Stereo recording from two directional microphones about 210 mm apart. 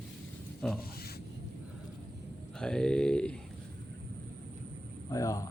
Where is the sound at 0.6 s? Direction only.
5° left (ahead or behind).